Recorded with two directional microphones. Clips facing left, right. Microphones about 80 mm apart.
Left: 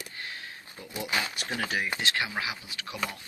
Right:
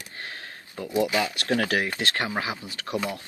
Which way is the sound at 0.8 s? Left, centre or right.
Right.